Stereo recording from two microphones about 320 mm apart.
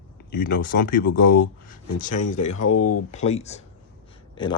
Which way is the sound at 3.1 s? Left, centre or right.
Left.